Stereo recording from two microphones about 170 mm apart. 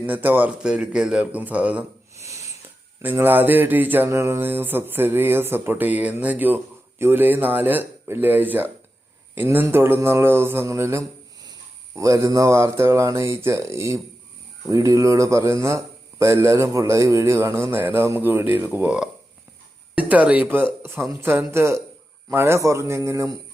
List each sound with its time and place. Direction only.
0.0 s speech: 10° right (ahead or behind)
2.2 s a sound: 20° right (ahead or behind)
3.0 s speech: 10° right (ahead or behind)